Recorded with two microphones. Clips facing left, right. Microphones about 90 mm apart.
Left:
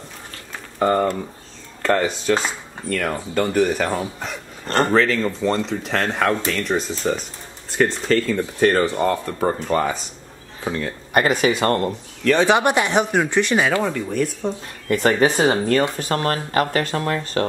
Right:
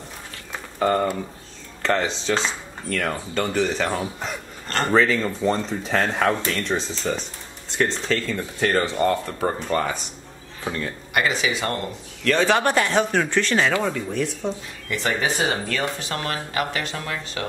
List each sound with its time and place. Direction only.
0.7 s speech: centre (ahead or behind)
11.1 s speech: 50° left (ahead or behind)
12.4 s speech: 15° left (ahead or behind)
14.9 s speech: 45° left (ahead or behind)